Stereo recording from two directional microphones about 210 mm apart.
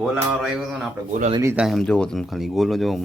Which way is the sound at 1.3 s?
15° right (ahead or behind).